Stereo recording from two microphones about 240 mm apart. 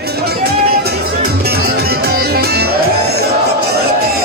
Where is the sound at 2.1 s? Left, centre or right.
Right.